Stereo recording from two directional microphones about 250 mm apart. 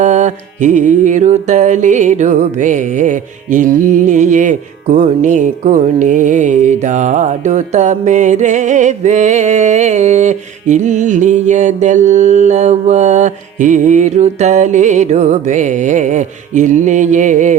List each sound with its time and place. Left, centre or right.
0.0 s mantra: right